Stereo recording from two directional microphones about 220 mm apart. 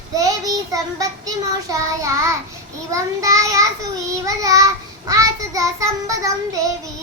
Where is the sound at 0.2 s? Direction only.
15° right (ahead or behind).